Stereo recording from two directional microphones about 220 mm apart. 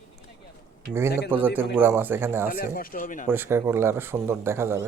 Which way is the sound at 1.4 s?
10° right (ahead or behind).